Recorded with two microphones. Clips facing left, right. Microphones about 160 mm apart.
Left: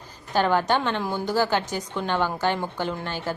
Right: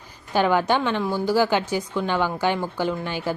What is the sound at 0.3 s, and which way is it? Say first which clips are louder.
A woman's voice: right 2 dB; 10° right (ahead or behind).